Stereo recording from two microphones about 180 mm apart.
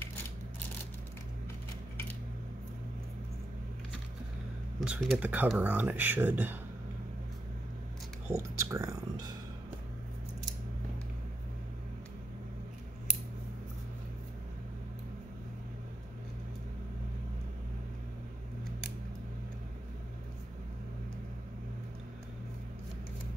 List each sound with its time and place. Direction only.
4.7 s speech: 5° right (ahead or behind)
8.4 s speech: 15° right (ahead or behind)